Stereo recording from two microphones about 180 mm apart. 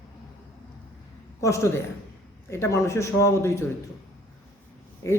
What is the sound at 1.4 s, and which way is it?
Speech, 15° left (ahead or behind).